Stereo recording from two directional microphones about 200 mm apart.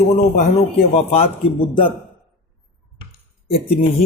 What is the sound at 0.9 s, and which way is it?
Speech, 30° left (ahead or behind).